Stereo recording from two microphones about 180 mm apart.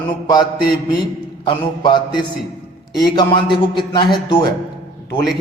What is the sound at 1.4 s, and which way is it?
A man's voice, 25° left (ahead or behind).